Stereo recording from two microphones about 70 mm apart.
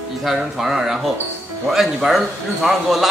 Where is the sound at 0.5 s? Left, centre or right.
Centre.